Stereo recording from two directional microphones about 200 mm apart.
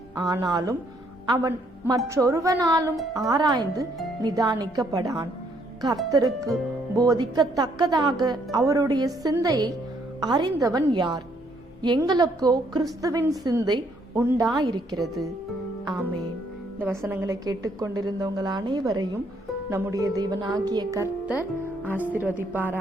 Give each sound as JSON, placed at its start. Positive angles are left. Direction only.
{"t": 0.2, "sound": "a woman's voice", "side_deg": -20}
{"t": 2.9, "sound": "speech", "side_deg": 0}
{"t": 3.2, "sound": "a woman's voice", "side_deg": -20}
{"t": 16.8, "sound": "a woman's voice", "side_deg": -10}